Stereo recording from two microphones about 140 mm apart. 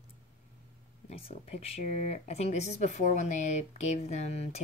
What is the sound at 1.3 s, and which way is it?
Speech, 45° left (ahead or behind).